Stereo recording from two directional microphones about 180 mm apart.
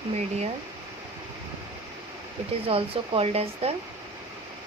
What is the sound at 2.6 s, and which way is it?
Speech, 30° right (ahead or behind).